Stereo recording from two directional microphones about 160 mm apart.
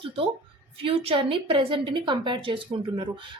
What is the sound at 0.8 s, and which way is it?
A woman's voice, 35° right (ahead or behind).